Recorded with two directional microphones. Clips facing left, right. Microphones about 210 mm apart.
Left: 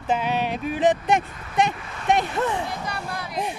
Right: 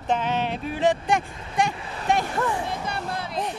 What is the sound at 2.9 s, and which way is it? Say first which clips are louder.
Speech: right 1 dB; 25° right (ahead or behind).